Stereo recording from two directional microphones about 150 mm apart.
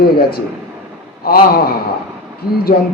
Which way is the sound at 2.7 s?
65° left (ahead or behind).